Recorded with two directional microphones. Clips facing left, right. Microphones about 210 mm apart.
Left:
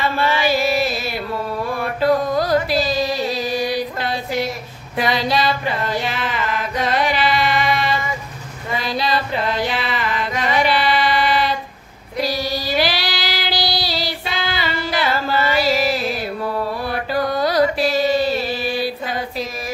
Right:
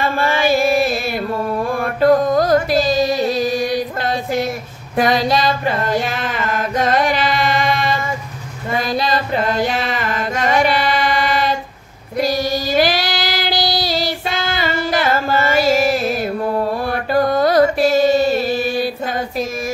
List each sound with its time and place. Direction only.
0.0 s chant: 45° right (ahead or behind)
4.9 s mantra: 45° right (ahead or behind)
8.7 s a sound: 45° right (ahead or behind)
12.2 s child singing: 45° right (ahead or behind)
16.8 s mantra: 50° right (ahead or behind)